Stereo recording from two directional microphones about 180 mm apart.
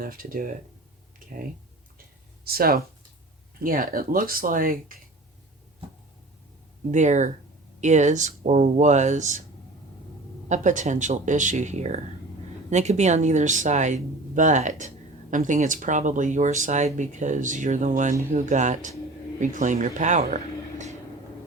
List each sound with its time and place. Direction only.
0.0 s speech: 55° right (ahead or behind)
2.4 s speech: 55° right (ahead or behind)
6.9 s speech: 40° right (ahead or behind)
10.5 s speech: 45° right (ahead or behind)